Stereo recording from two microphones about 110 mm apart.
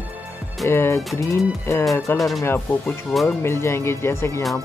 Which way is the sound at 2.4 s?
20° left (ahead or behind).